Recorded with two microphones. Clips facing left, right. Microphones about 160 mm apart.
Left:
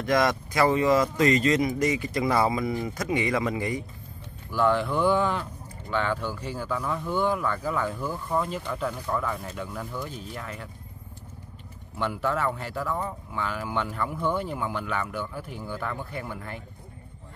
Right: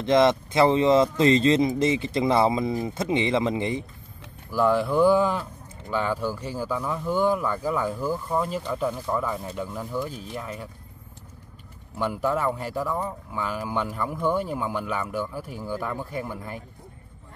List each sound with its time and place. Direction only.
0.0 s speech: 25° right (ahead or behind)
4.5 s speech: 10° right (ahead or behind)
12.0 s speech: 10° right (ahead or behind)